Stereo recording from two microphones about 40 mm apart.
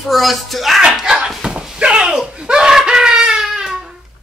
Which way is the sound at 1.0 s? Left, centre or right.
Centre.